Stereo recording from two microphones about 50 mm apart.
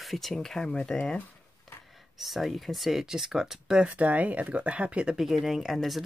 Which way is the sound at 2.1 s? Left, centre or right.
Centre.